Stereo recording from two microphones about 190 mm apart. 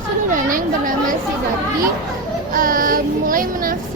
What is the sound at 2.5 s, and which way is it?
Speech, 45° right (ahead or behind).